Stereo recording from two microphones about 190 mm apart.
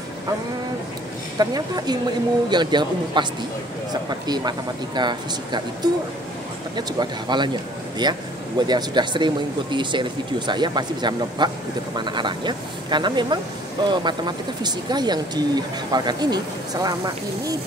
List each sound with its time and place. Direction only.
1.4 s speech: 20° right (ahead or behind)
4.3 s speech: 20° right (ahead or behind)
7.0 s speech: 25° right (ahead or behind)